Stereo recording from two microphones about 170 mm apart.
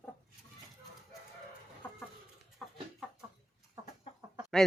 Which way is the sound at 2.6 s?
5° left (ahead or behind).